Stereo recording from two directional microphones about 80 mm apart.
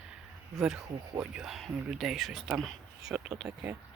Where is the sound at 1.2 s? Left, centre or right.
Centre.